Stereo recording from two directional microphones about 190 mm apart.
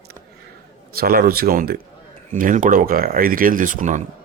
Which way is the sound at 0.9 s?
50° right (ahead or behind).